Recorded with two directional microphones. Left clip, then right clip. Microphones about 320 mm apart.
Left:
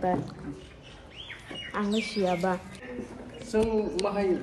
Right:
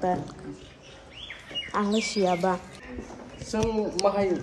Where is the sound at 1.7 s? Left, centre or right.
Centre.